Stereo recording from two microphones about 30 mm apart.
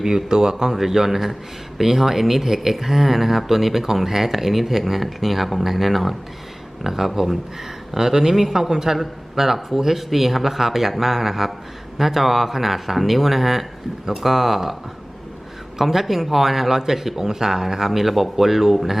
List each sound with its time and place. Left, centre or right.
0.3 s speech: right; by 7.3 s centre
7.9 s speech: centre
15.8 s speech: centre